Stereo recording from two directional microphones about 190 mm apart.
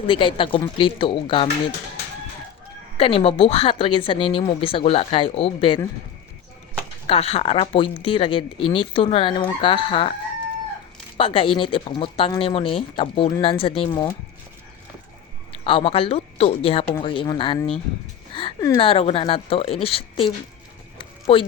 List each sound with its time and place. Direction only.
0.1 s speech: 25° left (ahead or behind)
3.0 s speech: 30° left (ahead or behind)
7.1 s speech: 30° left (ahead or behind)
11.2 s speech: 30° left (ahead or behind)
15.6 s speech: 30° left (ahead or behind)
18.3 s a sound: 30° left (ahead or behind)
18.8 s speech: 30° left (ahead or behind)
21.0 s a sound: 30° left (ahead or behind)